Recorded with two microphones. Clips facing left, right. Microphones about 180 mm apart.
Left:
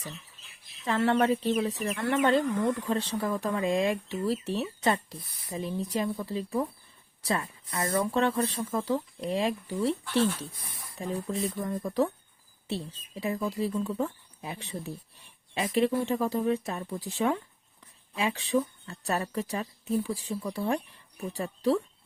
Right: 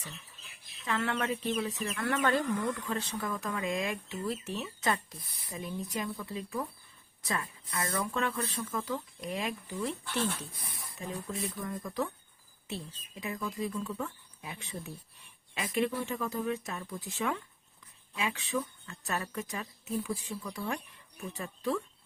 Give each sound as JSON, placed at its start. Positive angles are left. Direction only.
{"t": 0.9, "sound": "speech", "side_deg": 35}
{"t": 10.9, "sound": "speech", "side_deg": 30}